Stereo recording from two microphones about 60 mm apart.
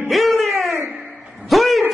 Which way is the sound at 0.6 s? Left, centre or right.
Right.